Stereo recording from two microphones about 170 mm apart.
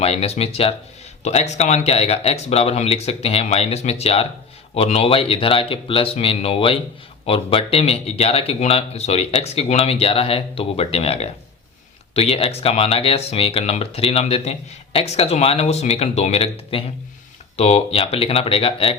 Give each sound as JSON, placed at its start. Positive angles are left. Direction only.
{"t": 0.0, "sound": "speech", "side_deg": 35}